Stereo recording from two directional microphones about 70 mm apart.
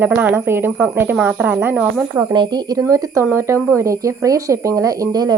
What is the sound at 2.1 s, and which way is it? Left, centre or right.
Speech, right.